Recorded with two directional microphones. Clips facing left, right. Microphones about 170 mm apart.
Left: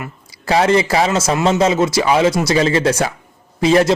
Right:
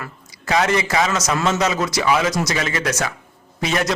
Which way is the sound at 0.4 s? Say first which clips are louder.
Left 5 dB; 30° left (ahead or behind).